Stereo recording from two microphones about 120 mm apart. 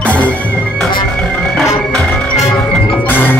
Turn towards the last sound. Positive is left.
turn(degrees=15)  # may be behind; listen again after turning